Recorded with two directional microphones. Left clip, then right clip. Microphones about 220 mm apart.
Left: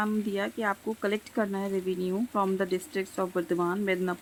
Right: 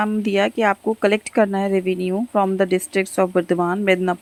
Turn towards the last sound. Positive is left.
turn(degrees=-30)  # may be behind; listen again after turning